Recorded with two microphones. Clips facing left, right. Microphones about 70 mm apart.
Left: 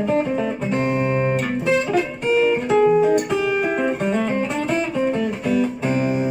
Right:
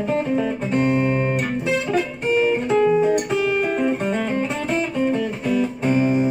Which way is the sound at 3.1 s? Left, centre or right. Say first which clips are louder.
Left 1 dB; left.